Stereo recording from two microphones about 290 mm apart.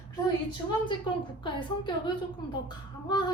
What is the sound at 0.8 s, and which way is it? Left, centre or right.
A woman's voice, centre.